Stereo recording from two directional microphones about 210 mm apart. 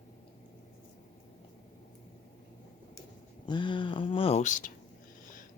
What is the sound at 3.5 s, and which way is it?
Speech, 20° left (ahead or behind).